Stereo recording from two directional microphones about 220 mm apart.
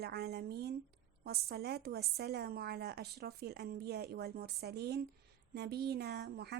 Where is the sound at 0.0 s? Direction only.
45° right (ahead or behind).